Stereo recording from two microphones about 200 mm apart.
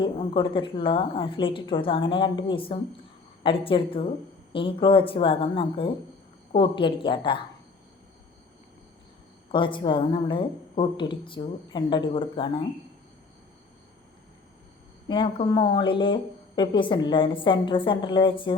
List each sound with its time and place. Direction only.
0.0 s a woman's voice: 25° left (ahead or behind)
9.5 s a woman's voice: 25° left (ahead or behind)
15.0 s a woman's voice: 25° left (ahead or behind)